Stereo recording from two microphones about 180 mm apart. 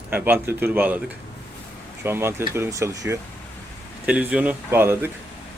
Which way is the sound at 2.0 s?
10° right (ahead or behind).